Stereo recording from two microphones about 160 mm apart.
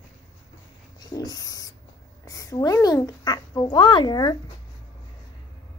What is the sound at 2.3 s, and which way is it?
Speech, 20° left (ahead or behind).